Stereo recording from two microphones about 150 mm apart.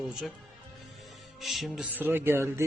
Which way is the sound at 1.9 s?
15° right (ahead or behind).